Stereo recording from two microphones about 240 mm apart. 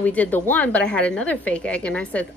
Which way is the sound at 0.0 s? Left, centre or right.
Centre.